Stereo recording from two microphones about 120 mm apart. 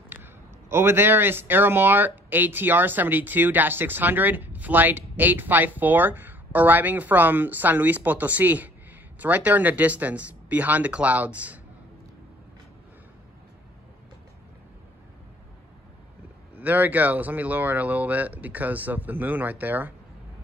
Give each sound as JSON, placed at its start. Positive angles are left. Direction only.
{"t": 0.1, "sound": "a man's voice", "side_deg": -20}
{"t": 16.5, "sound": "a man's voice", "side_deg": -15}